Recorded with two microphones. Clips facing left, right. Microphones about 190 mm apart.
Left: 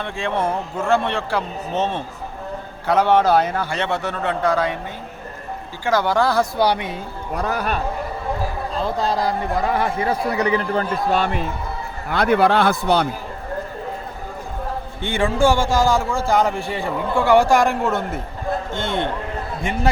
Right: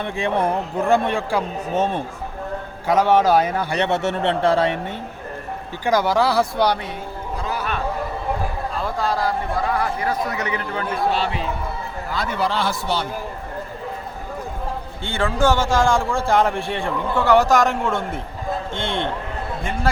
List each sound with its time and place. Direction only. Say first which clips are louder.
0.0 s a man's voice: right 1 dB; 15° right (ahead or behind)
5.8 s a man's voice: even; 10° right (ahead or behind)
7.3 s a man's voice: left 4 dB; 55° left (ahead or behind)
8.8 s a man's voice: left 2 dB; 20° left (ahead or behind); by 13.1 s 55° left (ahead or behind)
15.0 s a man's voice: left 2 dB; 15° left (ahead or behind)